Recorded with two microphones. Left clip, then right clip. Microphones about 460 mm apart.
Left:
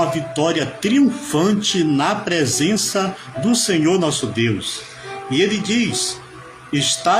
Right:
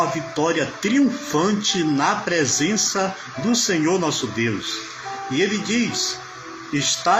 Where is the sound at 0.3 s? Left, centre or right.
Left.